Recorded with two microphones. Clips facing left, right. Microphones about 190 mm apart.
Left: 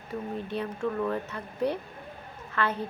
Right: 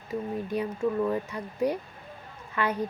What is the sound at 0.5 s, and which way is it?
A woman's voice, 10° right (ahead or behind).